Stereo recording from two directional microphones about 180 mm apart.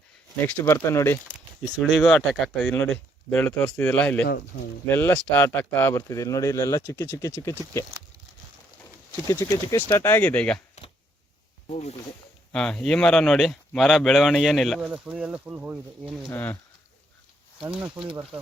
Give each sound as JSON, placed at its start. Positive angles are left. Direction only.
{"t": 0.4, "sound": "speech", "side_deg": 10}
{"t": 1.8, "sound": "speech", "side_deg": 0}
{"t": 8.8, "sound": "speech", "side_deg": 20}
{"t": 11.7, "sound": "speech", "side_deg": 35}
{"t": 12.5, "sound": "speech", "side_deg": 5}
{"t": 16.3, "sound": "speech", "side_deg": 10}
{"t": 17.9, "sound": "speech", "side_deg": -25}